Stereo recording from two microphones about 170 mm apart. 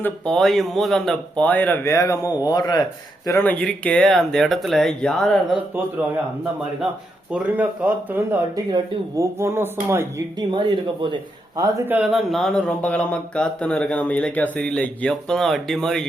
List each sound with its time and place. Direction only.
0.0 s a man's voice: 5° left (ahead or behind); by 2.8 s 25° left (ahead or behind)
3.2 s speech: 10° left (ahead or behind)
7.3 s speech: 10° right (ahead or behind); by 11.7 s 25° right (ahead or behind)
11.9 s speech: 5° right (ahead or behind)